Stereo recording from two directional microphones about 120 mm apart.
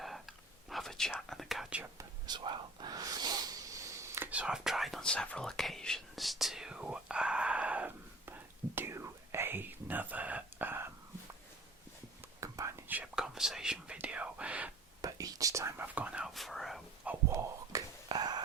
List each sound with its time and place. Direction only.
0.0 s whispering: centre (ahead or behind)
1.3 s speech: centre (ahead or behind)
2.0 s whispering: 35° right (ahead or behind)
4.3 s whispering: 10° right (ahead or behind)
12.4 s whispering: 25° right (ahead or behind)
12.9 s whispering: 10° right (ahead or behind)
15.0 s whispering: 30° right (ahead or behind); by 16.3 s 10° right (ahead or behind)
16.3 s whispering: centre (ahead or behind)
17.1 s a sound: 25° right (ahead or behind)